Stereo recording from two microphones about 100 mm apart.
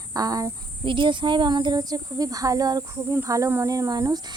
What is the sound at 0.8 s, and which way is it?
Speech, 55° right (ahead or behind).